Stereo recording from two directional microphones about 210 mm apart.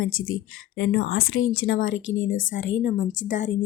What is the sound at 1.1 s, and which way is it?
Speech, 75° left (ahead or behind).